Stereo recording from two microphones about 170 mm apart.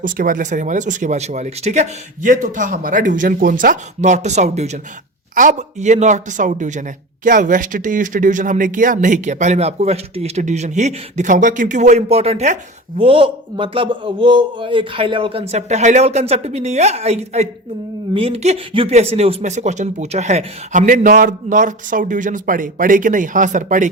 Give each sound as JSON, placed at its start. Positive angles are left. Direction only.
{"t": 0.0, "sound": "a man's voice", "side_deg": -55}